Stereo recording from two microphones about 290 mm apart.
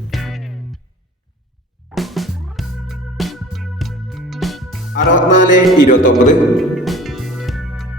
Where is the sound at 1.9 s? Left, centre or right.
Centre.